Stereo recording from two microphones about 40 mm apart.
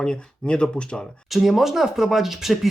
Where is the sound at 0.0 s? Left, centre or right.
Left.